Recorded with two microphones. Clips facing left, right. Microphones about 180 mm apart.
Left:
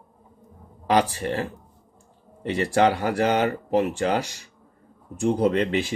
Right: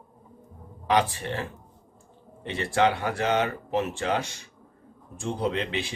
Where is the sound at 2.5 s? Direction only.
40° left (ahead or behind).